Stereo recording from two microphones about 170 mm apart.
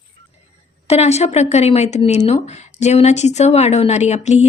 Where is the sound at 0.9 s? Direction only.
40° left (ahead or behind).